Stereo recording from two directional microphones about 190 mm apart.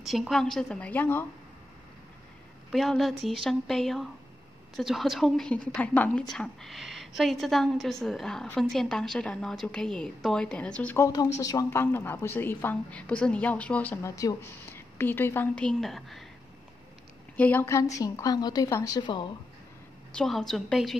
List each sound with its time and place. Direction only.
0.0 s a woman's voice: centre (ahead or behind)
2.7 s a woman's voice: centre (ahead or behind)
17.4 s a woman's voice: 10° left (ahead or behind)
20.2 s a woman's voice: centre (ahead or behind)